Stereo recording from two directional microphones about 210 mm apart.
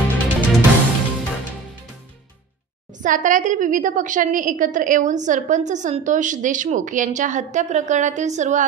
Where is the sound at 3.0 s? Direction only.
35° right (ahead or behind).